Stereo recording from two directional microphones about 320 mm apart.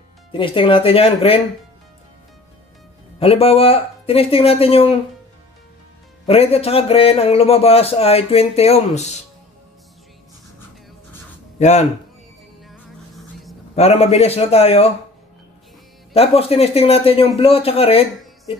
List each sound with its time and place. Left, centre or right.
0.3 s a man's voice: centre
3.2 s a man's voice: centre
6.2 s a man's voice: centre
11.5 s a sound: left
12.6 s music: centre
13.7 s a man's voice: centre
16.1 s a man's voice: centre